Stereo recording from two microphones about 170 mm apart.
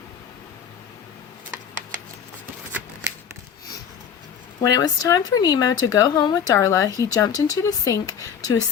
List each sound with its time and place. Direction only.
4.6 s speech: 20° left (ahead or behind)